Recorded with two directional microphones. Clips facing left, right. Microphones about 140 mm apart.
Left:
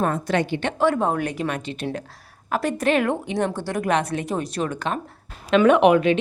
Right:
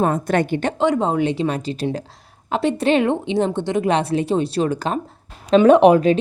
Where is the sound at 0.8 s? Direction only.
20° right (ahead or behind).